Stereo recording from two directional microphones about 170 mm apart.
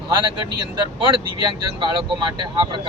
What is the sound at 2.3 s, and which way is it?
Speech, 25° right (ahead or behind).